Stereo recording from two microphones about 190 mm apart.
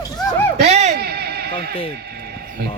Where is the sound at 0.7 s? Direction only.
35° right (ahead or behind).